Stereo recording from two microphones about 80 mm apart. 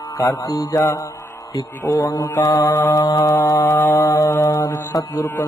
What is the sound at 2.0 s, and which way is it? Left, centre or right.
Mantra, left.